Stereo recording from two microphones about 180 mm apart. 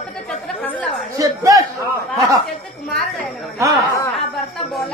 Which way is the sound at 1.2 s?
20° right (ahead or behind).